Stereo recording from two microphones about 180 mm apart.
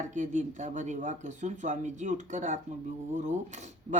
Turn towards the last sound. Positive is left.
turn(degrees=-40)  # may be behind; listen again after turning